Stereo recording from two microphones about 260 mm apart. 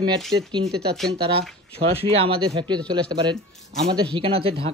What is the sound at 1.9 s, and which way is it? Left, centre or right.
Speech, right.